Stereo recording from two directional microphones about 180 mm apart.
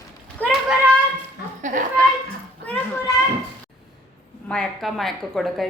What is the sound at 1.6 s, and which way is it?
Speech, 45° right (ahead or behind).